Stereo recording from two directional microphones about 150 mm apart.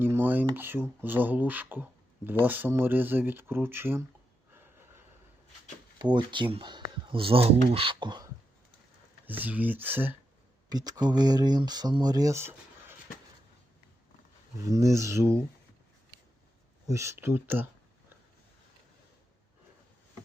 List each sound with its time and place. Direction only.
0.0 s speech: 15° right (ahead or behind)
4.5 s gasp: 15° right (ahead or behind)
6.0 s speech: 30° right (ahead or behind)
9.2 s speech: 10° right (ahead or behind)
10.7 s speech: 25° right (ahead or behind)
14.6 s speech: 20° right (ahead or behind)
16.8 s speech: 20° right (ahead or behind)